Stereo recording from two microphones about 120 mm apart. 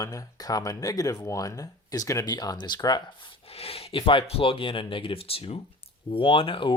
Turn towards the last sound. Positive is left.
turn(degrees=45)  # may be behind; listen again after turning